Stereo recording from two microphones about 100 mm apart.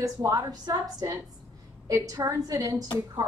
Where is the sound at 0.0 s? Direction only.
35° right (ahead or behind).